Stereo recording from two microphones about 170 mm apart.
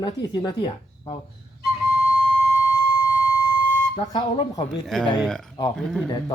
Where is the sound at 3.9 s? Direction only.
30° left (ahead or behind).